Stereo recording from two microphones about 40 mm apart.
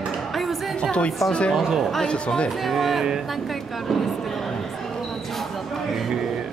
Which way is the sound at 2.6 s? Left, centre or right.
Centre.